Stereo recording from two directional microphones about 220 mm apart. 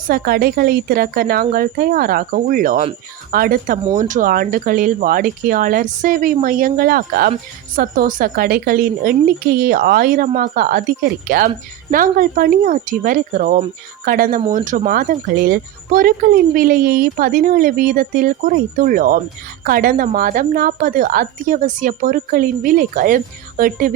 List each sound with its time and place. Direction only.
0.1 s speech: 45° right (ahead or behind)